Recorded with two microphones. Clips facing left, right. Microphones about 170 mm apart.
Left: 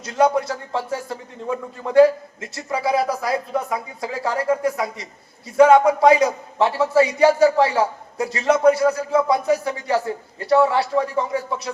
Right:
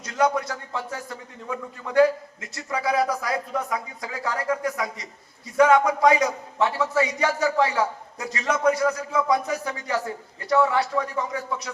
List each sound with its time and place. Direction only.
0.0 s a man's voice: 30° left (ahead or behind)